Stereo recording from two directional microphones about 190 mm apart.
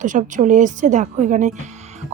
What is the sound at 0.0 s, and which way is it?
Speech, 40° right (ahead or behind).